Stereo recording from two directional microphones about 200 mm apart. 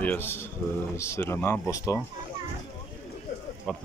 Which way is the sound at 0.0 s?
10° left (ahead or behind).